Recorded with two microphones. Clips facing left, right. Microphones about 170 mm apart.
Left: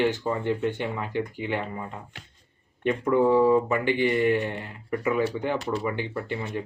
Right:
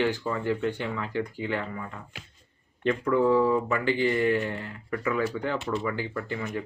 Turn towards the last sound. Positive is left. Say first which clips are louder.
# left 1 dB
turn(degrees=25)  # may be behind; listen again after turning